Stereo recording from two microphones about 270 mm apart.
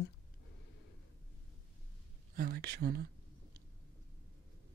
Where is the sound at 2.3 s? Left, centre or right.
Right.